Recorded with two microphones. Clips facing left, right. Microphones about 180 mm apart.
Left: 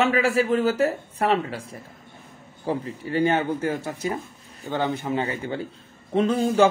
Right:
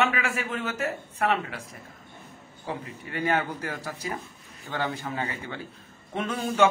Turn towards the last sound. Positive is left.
turn(degrees=30)  # may be behind; listen again after turning